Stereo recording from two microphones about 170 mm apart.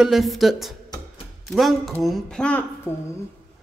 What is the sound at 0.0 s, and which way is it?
Speech, centre (ahead or behind).